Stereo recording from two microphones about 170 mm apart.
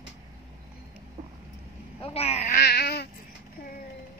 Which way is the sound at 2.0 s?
35° left (ahead or behind).